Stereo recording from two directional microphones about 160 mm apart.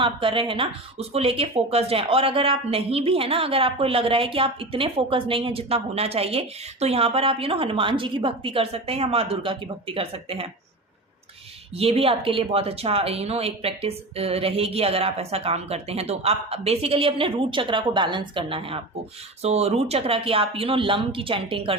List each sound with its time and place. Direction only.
0.0 s speech: 30° right (ahead or behind)
11.8 s speech: 40° right (ahead or behind)